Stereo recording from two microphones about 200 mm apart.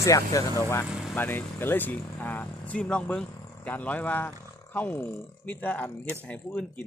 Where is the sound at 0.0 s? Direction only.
15° left (ahead or behind).